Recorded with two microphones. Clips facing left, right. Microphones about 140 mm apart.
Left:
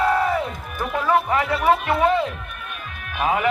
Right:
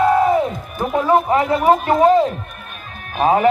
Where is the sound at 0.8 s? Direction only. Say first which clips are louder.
Right 5 dB; 35° right (ahead or behind).